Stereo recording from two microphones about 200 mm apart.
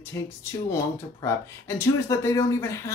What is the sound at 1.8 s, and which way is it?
Speech, 15° left (ahead or behind).